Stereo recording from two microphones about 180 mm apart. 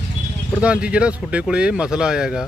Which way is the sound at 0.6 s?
5° right (ahead or behind).